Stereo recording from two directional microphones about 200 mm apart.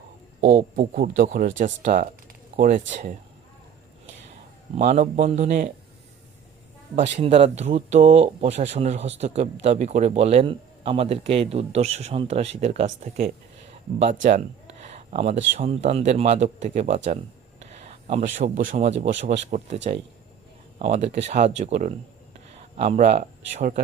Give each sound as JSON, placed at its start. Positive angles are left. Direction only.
{"t": 0.8, "sound": "speech", "side_deg": -45}
{"t": 4.3, "sound": "speech", "side_deg": -35}
{"t": 6.9, "sound": "speech", "side_deg": -35}
{"t": 14.8, "sound": "a sound", "side_deg": -30}
{"t": 15.5, "sound": "a man's voice", "side_deg": -35}